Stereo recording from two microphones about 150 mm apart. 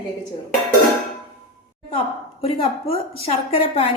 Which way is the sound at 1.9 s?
40° left (ahead or behind).